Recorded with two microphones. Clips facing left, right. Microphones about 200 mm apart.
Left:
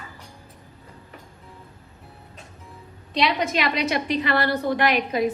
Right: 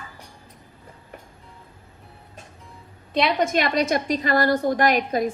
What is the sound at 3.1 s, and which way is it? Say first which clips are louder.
A woman's voice: right 2 dB; 50° right (ahead or behind).